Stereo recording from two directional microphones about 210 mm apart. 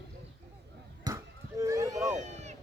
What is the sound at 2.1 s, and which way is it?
Run, 35° right (ahead or behind).